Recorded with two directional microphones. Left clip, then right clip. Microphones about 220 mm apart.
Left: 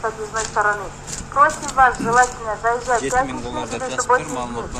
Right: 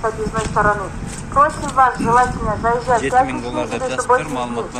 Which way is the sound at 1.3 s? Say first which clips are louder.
Right 1 dB; 45° right (ahead or behind).